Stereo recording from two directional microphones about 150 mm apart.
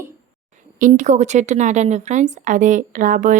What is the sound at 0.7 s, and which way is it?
A woman's voice, 60° right (ahead or behind).